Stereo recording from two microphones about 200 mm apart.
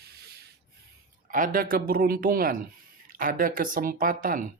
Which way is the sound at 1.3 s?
45° right (ahead or behind).